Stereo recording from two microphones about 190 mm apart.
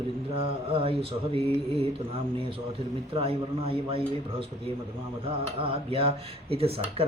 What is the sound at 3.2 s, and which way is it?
Speech, 30° right (ahead or behind).